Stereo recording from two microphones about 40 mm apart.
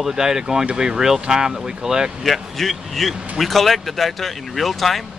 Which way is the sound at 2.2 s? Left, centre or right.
Centre.